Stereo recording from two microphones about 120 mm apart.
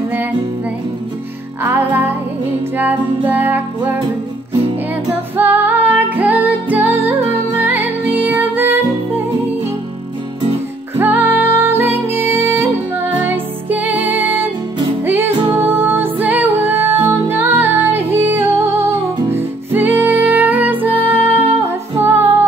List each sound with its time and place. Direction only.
1.6 s music: 15° right (ahead or behind)
5.4 s music: 15° right (ahead or behind)
11.0 s music: 15° right (ahead or behind)